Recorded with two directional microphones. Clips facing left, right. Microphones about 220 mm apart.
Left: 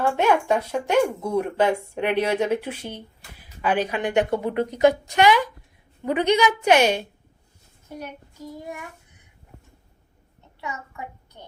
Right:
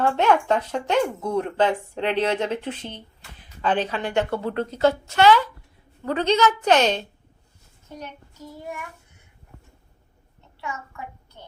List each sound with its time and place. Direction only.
0.0 s speech: 10° left (ahead or behind)
7.9 s child singing: 10° left (ahead or behind)
10.6 s child singing: 20° left (ahead or behind)